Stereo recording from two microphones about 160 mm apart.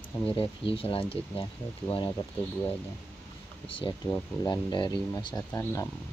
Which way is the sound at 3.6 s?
30° left (ahead or behind).